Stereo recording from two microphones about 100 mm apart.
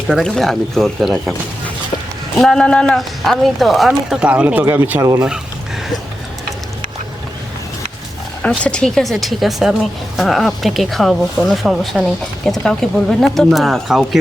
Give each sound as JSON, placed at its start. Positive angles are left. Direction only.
{"t": 0.1, "sound": "speech", "side_deg": 5}
{"t": 2.4, "sound": "speech", "side_deg": 5}
{"t": 8.4, "sound": "speech", "side_deg": 10}